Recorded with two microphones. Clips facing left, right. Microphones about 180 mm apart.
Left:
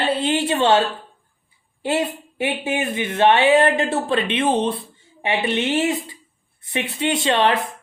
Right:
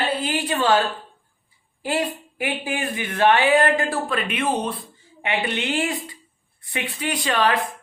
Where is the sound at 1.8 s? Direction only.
25° left (ahead or behind).